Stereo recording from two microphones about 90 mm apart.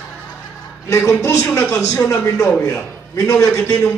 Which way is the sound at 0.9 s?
30° left (ahead or behind).